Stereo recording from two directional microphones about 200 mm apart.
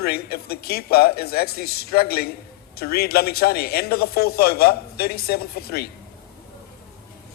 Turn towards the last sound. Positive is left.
turn(degrees=50)  # may be behind; listen again after turning